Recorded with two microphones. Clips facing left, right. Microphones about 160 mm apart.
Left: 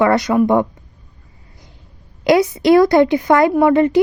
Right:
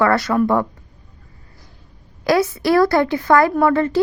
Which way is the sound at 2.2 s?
20° left (ahead or behind).